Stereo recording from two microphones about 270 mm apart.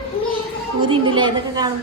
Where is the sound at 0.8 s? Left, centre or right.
Centre.